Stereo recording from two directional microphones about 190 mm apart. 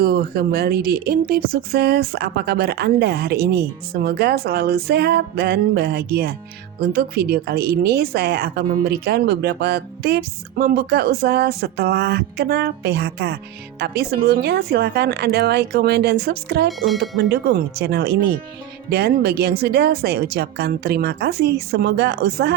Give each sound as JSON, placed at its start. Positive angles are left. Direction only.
{"t": 0.0, "sound": "a woman's voice", "side_deg": -50}
{"t": 16.6, "sound": "speech", "side_deg": 0}
{"t": 17.2, "sound": "a woman's voice", "side_deg": -55}